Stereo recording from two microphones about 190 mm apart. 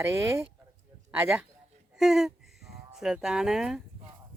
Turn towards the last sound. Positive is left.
turn(degrees=0)  # may be behind; listen again after turning